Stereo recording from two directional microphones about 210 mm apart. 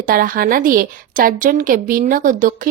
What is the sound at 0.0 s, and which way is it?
A woman's voice, 40° right (ahead or behind).